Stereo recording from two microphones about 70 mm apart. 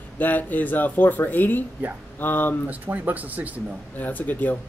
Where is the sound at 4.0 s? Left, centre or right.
Left.